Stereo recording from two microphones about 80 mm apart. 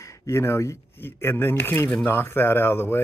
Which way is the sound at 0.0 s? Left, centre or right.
Left.